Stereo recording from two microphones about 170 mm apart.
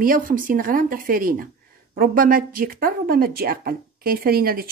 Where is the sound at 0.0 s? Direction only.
55° right (ahead or behind).